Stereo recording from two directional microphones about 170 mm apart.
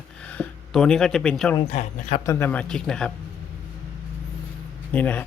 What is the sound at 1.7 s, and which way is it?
Speech, 40° left (ahead or behind).